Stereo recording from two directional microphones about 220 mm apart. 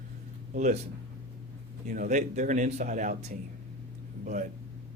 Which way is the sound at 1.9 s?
35° right (ahead or behind).